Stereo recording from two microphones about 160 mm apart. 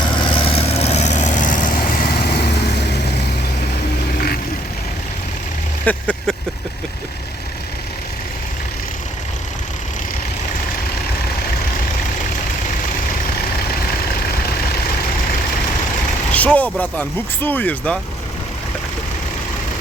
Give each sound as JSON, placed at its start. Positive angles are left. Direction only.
{"t": 0.0, "sound": "vehicle", "side_deg": 30}
{"t": 5.8, "sound": "vehicle", "side_deg": 10}
{"t": 16.3, "sound": "vehicle", "side_deg": 10}
{"t": 16.8, "sound": "speech", "side_deg": 10}